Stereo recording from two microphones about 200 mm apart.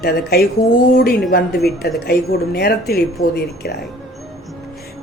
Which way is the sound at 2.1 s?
50° left (ahead or behind).